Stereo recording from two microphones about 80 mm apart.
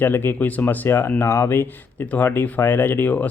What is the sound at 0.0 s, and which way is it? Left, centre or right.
Speech, left.